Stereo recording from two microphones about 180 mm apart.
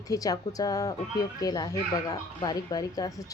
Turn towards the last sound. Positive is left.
turn(degrees=20)  # may be behind; listen again after turning